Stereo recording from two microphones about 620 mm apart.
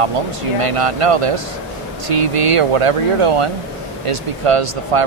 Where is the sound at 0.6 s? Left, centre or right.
Right.